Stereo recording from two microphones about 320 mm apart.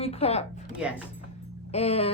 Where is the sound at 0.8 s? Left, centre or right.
Centre.